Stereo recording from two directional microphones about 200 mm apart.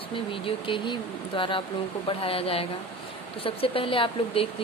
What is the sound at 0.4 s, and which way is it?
Speech, 25° left (ahead or behind).